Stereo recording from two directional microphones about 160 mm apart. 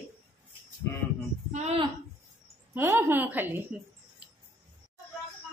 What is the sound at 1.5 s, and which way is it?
Speech, 45° right (ahead or behind).